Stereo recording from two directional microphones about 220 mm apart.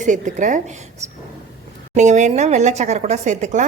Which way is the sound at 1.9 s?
30° right (ahead or behind).